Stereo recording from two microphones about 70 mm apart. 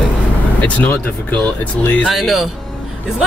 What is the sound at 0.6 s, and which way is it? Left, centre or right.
Speech, left.